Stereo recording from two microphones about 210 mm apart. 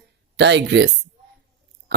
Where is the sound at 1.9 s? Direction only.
50° right (ahead or behind).